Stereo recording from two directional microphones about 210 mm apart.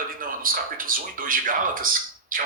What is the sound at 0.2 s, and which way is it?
Speech, 40° right (ahead or behind).